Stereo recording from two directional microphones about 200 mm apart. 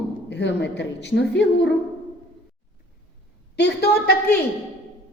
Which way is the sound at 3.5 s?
55° left (ahead or behind).